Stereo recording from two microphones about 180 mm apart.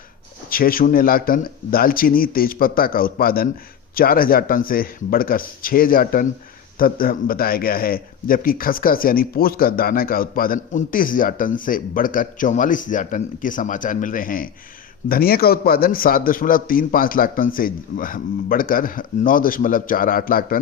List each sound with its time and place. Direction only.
0.5 s a man's voice: 55° left (ahead or behind)